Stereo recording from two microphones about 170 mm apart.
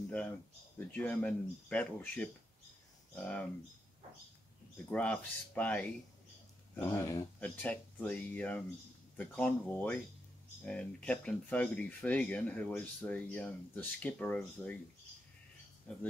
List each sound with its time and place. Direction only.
0.7 s speech: 10° left (ahead or behind)
4.9 s speech: 5° left (ahead or behind)
15.9 s speech: 5° left (ahead or behind)